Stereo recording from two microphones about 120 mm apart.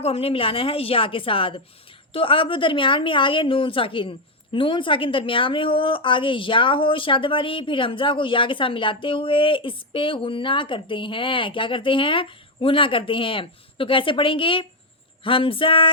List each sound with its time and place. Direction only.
0.0 s a woman's voice: 55° left (ahead or behind)